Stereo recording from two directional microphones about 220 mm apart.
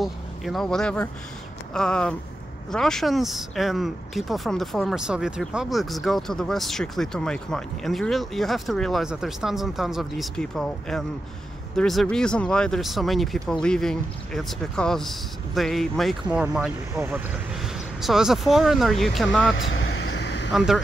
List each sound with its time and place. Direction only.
0.0 s speech: centre (ahead or behind)
19.5 s vehicle: 60° left (ahead or behind)
20.5 s speech: centre (ahead or behind)